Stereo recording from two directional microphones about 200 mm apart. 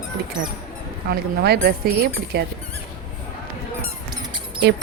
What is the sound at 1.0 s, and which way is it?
Speech, 55° right (ahead or behind).